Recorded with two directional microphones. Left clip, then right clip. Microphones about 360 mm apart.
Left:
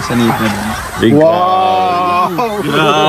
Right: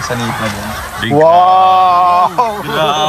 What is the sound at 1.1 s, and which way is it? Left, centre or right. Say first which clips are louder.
Sheep: right 4 dB; right.